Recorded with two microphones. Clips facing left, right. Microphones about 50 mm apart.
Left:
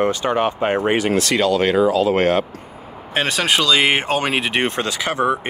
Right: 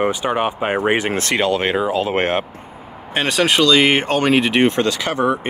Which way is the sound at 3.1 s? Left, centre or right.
Centre.